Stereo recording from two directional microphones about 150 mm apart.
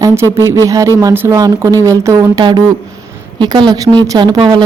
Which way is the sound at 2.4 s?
30° right (ahead or behind).